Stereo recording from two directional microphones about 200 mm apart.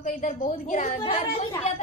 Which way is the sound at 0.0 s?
40° left (ahead or behind).